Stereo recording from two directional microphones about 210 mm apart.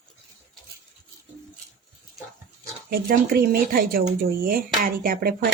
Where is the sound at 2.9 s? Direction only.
45° right (ahead or behind).